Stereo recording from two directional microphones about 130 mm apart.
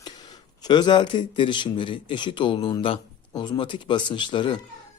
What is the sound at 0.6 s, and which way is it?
Speech, 35° left (ahead or behind).